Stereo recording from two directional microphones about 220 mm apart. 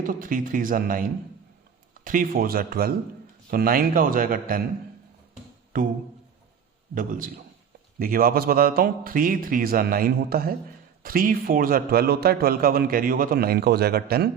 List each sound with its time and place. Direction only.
0.0 s a man's voice: 40° right (ahead or behind)
6.9 s a man's voice: 40° right (ahead or behind)